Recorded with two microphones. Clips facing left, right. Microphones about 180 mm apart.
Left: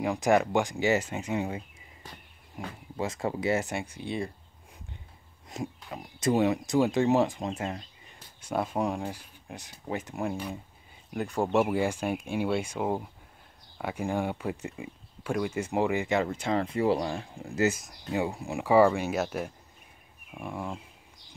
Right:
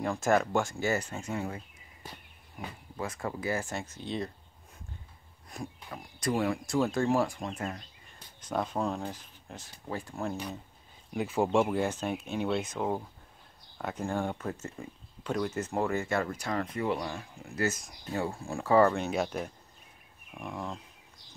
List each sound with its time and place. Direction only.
0.0 s speech: 15° left (ahead or behind)
5.5 s speech: 20° left (ahead or behind)
8.4 s speech: 10° left (ahead or behind)
11.1 s speech: 5° right (ahead or behind); by 17.6 s 30° left (ahead or behind)
17.6 s speech: 10° left (ahead or behind)